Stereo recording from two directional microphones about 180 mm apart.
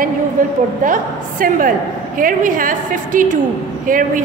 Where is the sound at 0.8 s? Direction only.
50° right (ahead or behind).